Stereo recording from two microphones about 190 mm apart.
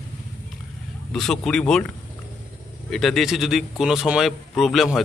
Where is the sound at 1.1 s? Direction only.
5° left (ahead or behind).